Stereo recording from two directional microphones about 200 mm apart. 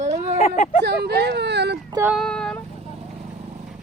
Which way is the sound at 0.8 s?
55° right (ahead or behind).